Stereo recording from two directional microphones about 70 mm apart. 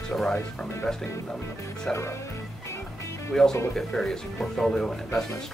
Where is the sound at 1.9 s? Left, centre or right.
Left.